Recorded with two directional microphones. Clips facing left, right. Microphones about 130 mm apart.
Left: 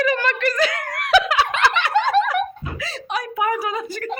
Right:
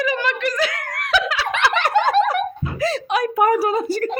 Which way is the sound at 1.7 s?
45° right (ahead or behind).